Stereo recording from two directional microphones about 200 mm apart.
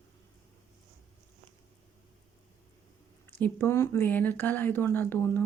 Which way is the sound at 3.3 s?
10° left (ahead or behind).